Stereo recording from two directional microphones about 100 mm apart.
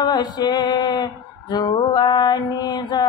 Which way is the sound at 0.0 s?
45° left (ahead or behind).